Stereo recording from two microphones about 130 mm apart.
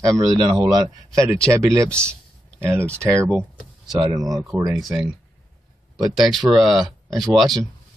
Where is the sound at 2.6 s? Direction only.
20° right (ahead or behind).